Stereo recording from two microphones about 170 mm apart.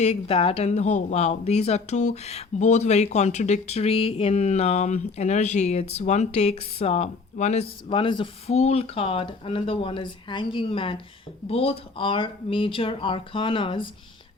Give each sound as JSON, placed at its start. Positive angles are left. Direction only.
{"t": 0.0, "sound": "speech", "side_deg": 35}